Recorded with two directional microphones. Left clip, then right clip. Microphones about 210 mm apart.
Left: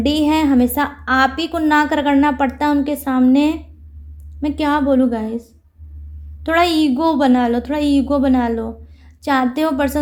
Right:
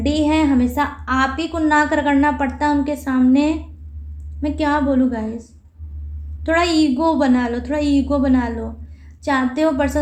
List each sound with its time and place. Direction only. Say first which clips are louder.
0.0 s a woman's voice: left 1 dB; 40° left (ahead or behind)